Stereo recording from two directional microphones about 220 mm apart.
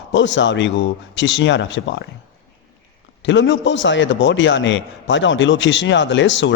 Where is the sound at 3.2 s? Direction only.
55° left (ahead or behind).